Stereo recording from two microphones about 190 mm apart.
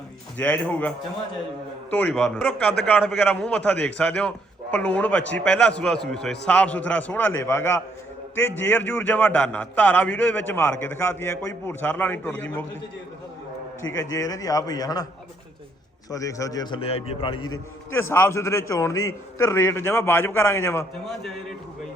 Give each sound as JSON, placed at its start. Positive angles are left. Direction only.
{"t": 0.3, "sound": "a man's voice", "side_deg": 10}
{"t": 13.9, "sound": "a man's voice", "side_deg": 15}
{"t": 16.0, "sound": "a man's voice", "side_deg": 15}
{"t": 17.9, "sound": "a man's voice", "side_deg": 15}